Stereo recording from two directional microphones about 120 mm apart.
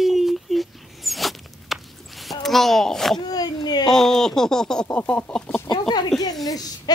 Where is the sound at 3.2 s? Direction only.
35° left (ahead or behind).